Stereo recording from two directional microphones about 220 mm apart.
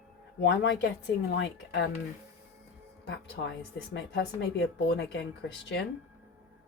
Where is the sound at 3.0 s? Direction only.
50° left (ahead or behind).